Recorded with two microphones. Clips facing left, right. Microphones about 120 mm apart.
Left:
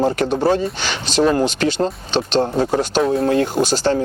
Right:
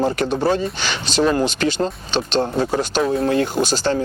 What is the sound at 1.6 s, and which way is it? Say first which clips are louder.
Speech: left 2 dB; 25° left (ahead or behind).